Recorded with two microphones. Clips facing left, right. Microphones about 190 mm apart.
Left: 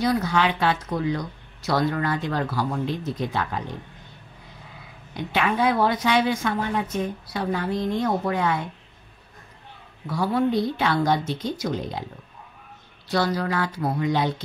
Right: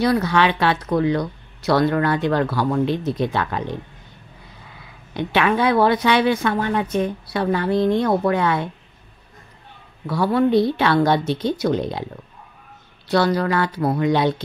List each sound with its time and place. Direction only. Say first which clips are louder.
0.0 s a woman's voice: right 4 dB; 70° right (ahead or behind)
5.1 s a woman's voice: right 5 dB; 70° right (ahead or behind)
10.0 s a woman's voice: right 4 dB; 70° right (ahead or behind)
13.1 s speech: right 5 dB; 65° right (ahead or behind)